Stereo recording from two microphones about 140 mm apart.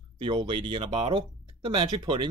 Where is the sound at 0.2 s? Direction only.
35° right (ahead or behind).